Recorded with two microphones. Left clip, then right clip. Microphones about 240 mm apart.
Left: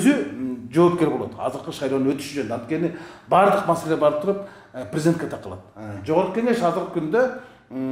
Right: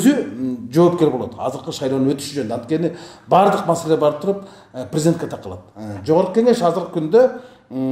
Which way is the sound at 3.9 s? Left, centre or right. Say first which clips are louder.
Right 2 dB; right.